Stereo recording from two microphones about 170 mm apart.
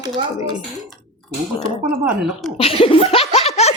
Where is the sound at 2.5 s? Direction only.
35° left (ahead or behind).